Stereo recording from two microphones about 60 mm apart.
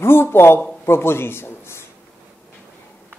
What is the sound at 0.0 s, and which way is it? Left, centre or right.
A man's voice, left.